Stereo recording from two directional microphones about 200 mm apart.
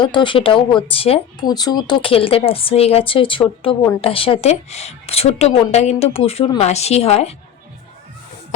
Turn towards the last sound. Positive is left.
turn(degrees=30)  # may be behind; listen again after turning